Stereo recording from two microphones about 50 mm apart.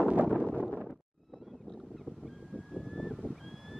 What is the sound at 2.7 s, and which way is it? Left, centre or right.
Vehicle, centre.